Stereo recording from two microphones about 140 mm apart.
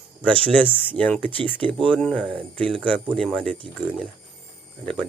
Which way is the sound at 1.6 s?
40° right (ahead or behind).